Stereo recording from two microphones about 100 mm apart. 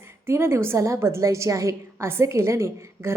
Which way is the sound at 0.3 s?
25° right (ahead or behind).